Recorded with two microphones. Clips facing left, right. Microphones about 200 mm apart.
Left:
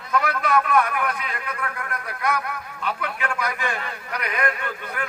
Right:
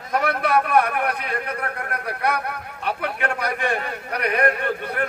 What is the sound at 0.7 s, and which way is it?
Speech, 60° right (ahead or behind).